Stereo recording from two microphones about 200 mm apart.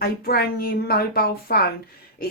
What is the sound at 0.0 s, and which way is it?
Speech, 50° left (ahead or behind).